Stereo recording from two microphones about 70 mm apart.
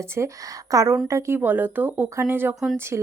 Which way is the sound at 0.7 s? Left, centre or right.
Right.